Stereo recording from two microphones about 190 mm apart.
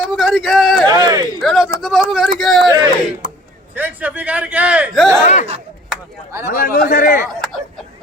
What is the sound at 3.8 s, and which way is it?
Speech, 10° right (ahead or behind).